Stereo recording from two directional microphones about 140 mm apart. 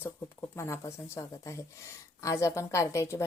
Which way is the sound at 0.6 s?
20° left (ahead or behind).